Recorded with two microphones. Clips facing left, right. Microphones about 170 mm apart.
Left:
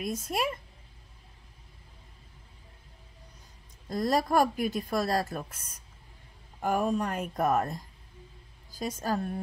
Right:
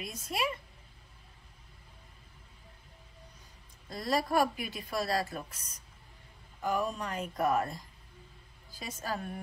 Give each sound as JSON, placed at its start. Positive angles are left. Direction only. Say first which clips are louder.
{"t": 0.0, "sound": "speech", "louder": "left 4 dB", "side_deg": 45}
{"t": 3.9, "sound": "speech", "louder": "left 4 dB", "side_deg": 45}
{"t": 8.7, "sound": "speech", "louder": "left 7 dB", "side_deg": 45}